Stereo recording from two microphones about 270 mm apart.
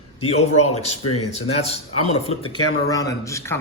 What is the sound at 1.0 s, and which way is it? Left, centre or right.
Speech, left.